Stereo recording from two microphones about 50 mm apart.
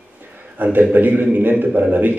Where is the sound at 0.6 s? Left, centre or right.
Right.